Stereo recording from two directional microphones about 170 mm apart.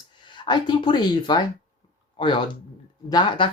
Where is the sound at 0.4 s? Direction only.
25° left (ahead or behind).